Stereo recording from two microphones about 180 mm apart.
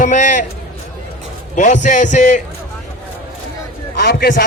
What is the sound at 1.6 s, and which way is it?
Speech, 45° left (ahead or behind).